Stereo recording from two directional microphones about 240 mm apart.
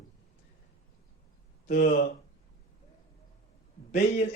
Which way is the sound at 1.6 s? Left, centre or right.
Left.